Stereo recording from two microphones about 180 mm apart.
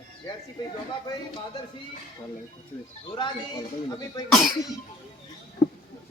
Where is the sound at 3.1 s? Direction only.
25° left (ahead or behind).